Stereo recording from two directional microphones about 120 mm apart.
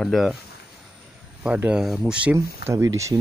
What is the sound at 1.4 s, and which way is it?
Speech, 10° right (ahead or behind).